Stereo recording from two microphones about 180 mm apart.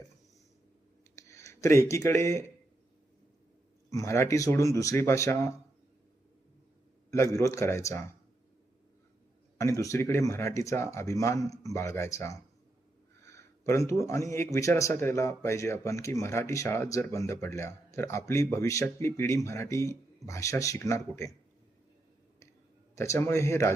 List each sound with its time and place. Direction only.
1.1 s speech: 15° left (ahead or behind)
3.8 s speech: 20° left (ahead or behind)
7.1 s speech: 15° left (ahead or behind)
9.6 s speech: 15° left (ahead or behind)
13.2 s a sound: 15° left (ahead or behind)
14.0 s speech: 15° left (ahead or behind)
23.0 s speech: 15° left (ahead or behind)